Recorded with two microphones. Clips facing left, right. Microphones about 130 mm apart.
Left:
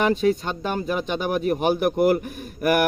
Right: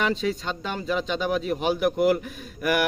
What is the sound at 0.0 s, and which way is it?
Speech, 50° left (ahead or behind).